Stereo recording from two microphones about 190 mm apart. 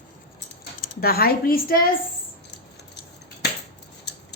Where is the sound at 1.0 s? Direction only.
55° left (ahead or behind).